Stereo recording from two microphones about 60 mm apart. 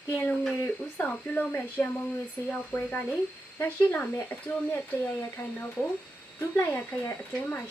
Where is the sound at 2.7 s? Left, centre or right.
Left.